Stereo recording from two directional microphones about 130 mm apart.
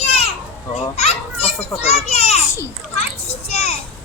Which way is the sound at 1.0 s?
55° left (ahead or behind).